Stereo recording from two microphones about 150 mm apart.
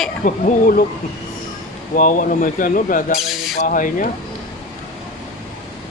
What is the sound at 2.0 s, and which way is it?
Speech, 60° left (ahead or behind).